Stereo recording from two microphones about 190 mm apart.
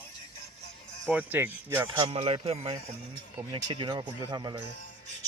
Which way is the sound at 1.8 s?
25° right (ahead or behind).